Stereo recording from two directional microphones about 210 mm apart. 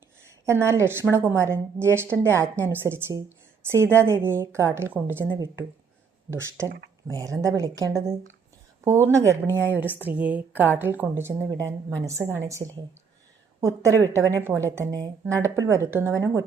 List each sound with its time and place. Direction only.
0.4 s a woman's voice: 15° right (ahead or behind)